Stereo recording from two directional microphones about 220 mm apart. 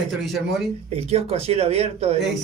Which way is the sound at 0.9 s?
30° right (ahead or behind).